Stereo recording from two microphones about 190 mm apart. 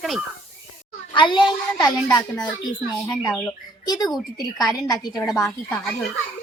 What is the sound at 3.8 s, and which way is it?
Speech, 20° left (ahead or behind).